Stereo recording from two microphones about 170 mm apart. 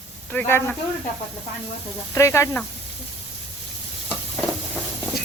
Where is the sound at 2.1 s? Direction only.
15° left (ahead or behind).